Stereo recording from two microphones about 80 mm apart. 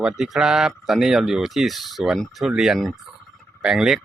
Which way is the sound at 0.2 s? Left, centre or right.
Centre.